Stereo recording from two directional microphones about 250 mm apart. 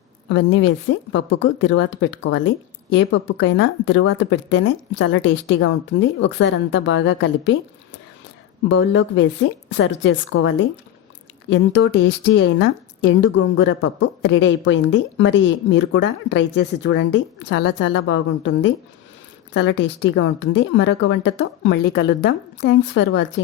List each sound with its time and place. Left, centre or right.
0.3 s a woman's voice: left
3.2 s a woman's voice: left
8.7 s a woman's voice: left